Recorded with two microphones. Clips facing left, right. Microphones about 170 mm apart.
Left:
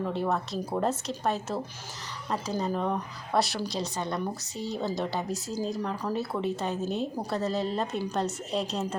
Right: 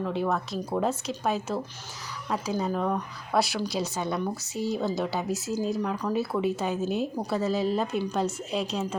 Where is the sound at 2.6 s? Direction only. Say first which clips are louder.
Right 1 dB; centre (ahead or behind).